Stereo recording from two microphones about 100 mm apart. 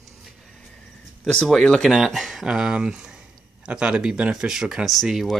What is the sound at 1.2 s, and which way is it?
Speech, 5° left (ahead or behind).